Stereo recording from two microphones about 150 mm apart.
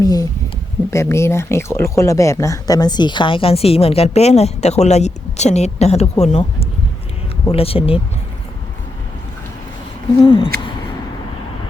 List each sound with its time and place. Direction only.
0.0 s speech: 25° left (ahead or behind); by 8.0 s 40° left (ahead or behind)
10.2 s speech: 35° left (ahead or behind)